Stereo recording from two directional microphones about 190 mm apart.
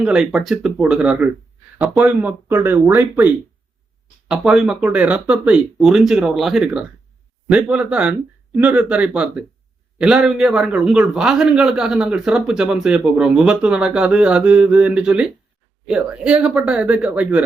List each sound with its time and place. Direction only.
0.0 s a man's voice: 5° right (ahead or behind)
4.3 s a man's voice: 5° right (ahead or behind)